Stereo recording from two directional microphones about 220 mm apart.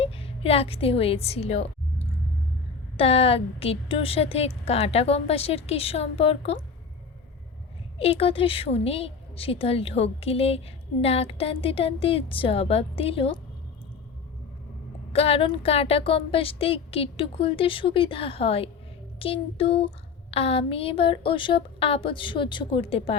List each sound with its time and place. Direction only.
0.0 s a woman's voice: 25° left (ahead or behind)
3.0 s a woman's voice: 25° left (ahead or behind)
7.9 s a woman's voice: 25° left (ahead or behind)
15.1 s a woman's voice: 25° left (ahead or behind)